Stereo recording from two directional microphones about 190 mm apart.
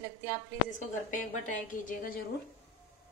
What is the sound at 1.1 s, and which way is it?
A woman's voice, 40° left (ahead or behind).